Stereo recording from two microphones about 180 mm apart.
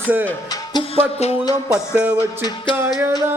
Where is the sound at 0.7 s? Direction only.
30° left (ahead or behind).